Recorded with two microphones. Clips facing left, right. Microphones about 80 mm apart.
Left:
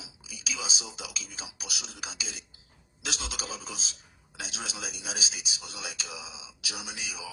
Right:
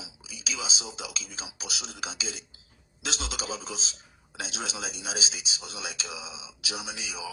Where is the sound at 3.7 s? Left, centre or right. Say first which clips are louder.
Right 3 dB; left.